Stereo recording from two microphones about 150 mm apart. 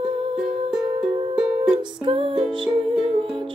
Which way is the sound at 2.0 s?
35° right (ahead or behind).